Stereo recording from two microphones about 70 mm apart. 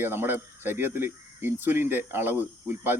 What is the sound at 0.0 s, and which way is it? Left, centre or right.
Speech, right.